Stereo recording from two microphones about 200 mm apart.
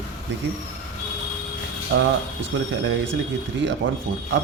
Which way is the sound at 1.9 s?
60° right (ahead or behind).